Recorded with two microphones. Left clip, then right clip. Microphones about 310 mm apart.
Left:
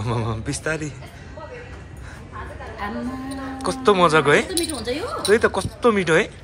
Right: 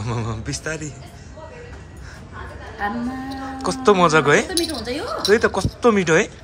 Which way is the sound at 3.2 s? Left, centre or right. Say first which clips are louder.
Even; centre.